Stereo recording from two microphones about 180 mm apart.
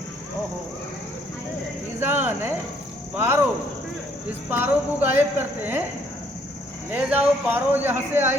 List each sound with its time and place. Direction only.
2.0 s cricket: 10° right (ahead or behind)
3.2 s speech: 10° right (ahead or behind)
4.4 s speech: 10° right (ahead or behind)
6.9 s speech: 10° right (ahead or behind)